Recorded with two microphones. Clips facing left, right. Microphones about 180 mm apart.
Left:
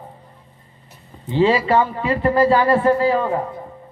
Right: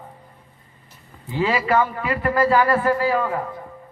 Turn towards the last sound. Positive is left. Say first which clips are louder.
# left 3 dB
turn(degrees=30)  # may be behind; listen again after turning